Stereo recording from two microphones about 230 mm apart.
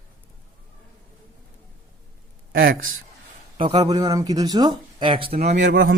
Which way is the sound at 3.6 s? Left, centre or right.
Centre.